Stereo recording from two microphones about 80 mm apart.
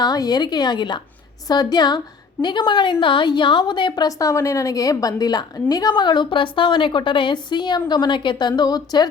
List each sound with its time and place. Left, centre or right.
0.0 s a woman's voice: left
1.5 s a woman's voice: left
2.4 s a woman's voice: left
7.5 s a woman's voice: left